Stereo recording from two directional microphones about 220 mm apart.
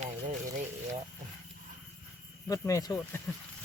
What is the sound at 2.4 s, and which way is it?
Speech, 15° left (ahead or behind).